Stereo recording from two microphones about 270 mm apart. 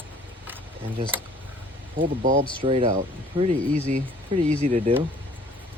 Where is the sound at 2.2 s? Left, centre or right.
Right.